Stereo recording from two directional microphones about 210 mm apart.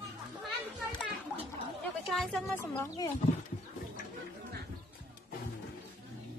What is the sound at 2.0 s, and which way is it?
Speech, centre (ahead or behind).